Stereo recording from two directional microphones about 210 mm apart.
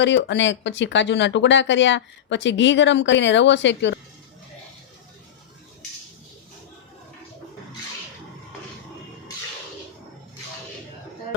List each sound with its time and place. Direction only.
0.0 s speech: 60° left (ahead or behind)